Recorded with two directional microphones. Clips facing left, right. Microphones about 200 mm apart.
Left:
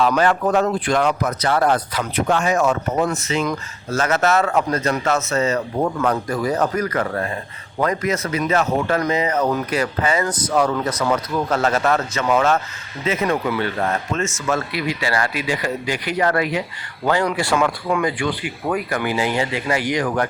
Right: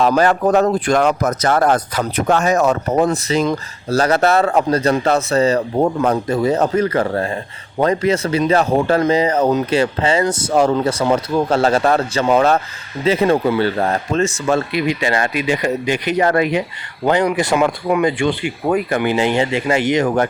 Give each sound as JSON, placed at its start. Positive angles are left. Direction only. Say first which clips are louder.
{"t": 0.0, "sound": "speech", "louder": "right 3 dB", "side_deg": -40}